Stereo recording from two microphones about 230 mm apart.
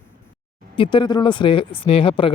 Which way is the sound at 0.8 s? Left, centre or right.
Left.